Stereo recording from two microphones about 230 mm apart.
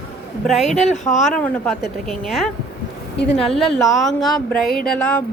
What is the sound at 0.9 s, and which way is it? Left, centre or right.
Speech, left.